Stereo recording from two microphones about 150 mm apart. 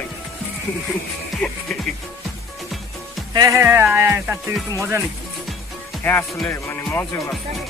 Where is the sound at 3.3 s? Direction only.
25° right (ahead or behind).